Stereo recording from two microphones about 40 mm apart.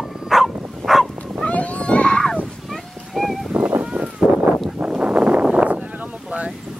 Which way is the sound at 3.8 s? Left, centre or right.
Right.